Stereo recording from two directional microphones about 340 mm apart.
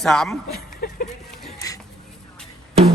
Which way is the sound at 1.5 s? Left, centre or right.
Centre.